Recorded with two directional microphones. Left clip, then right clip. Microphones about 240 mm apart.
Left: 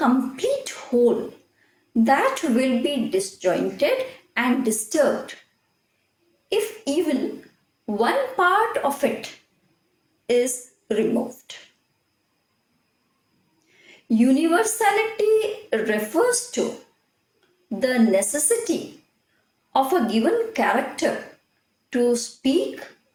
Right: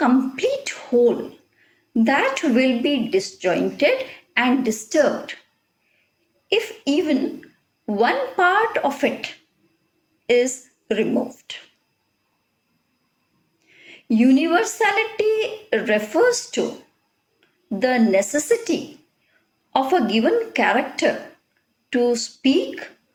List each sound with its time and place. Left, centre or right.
0.0 s a sound: right
2.0 s speech: right
6.5 s a woman's voice: right
13.8 s speech: right
17.7 s speech: right